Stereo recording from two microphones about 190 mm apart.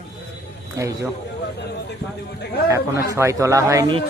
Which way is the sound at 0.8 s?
15° right (ahead or behind).